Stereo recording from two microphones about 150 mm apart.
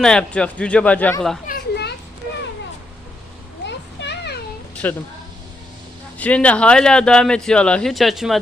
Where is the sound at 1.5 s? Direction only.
90° left.